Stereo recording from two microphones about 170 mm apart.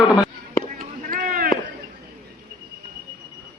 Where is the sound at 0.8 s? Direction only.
55° right (ahead or behind).